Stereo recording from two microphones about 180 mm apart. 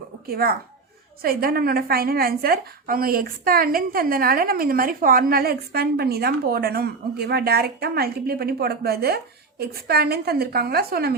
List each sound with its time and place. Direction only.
0.3 s a woman's voice: 60° right (ahead or behind)